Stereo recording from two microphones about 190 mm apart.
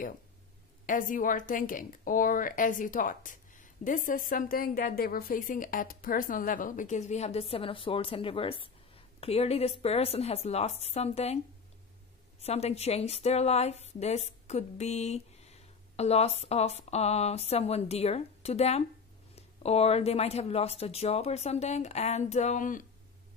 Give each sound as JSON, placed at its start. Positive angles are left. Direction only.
{"t": 0.8, "sound": "a woman's voice", "side_deg": 45}
{"t": 12.4, "sound": "speech", "side_deg": 35}